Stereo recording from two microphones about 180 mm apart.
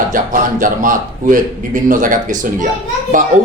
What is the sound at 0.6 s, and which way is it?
Speech, 50° right (ahead or behind).